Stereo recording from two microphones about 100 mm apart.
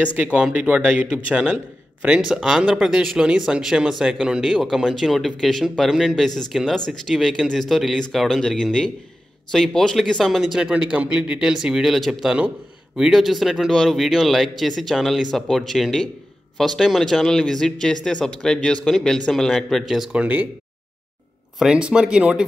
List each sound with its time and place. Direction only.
0.0 s speech: 15° right (ahead or behind)
20.1 s speech: 15° right (ahead or behind)
21.5 s speech: 10° right (ahead or behind)